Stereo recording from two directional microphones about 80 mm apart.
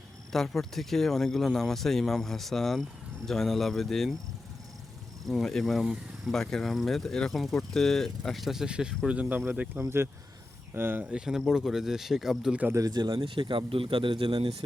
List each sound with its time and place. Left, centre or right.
0.3 s speech: centre
5.2 s speech: centre; by 11.0 s right
11.1 s speech: centre
12.7 s a man's voice: right